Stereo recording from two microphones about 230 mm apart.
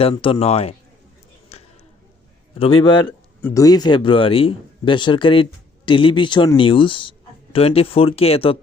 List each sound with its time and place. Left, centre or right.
0.0 s a man's voice: left
1.5 s a sound: left
2.6 s a man's voice: left